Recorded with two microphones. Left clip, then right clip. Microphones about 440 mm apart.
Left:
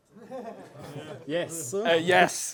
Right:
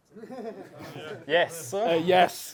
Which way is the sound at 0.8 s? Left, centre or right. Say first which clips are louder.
Right 2 dB; right.